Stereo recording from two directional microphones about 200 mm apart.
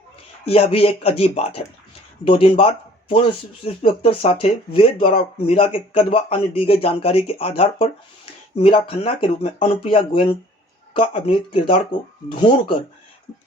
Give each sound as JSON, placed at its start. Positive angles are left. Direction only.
{"t": 0.4, "sound": "speech", "side_deg": 30}